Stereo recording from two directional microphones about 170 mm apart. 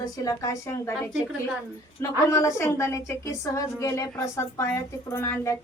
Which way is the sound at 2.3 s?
20° left (ahead or behind).